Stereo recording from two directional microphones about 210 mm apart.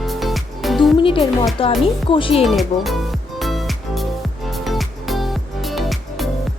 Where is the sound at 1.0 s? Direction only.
25° left (ahead or behind).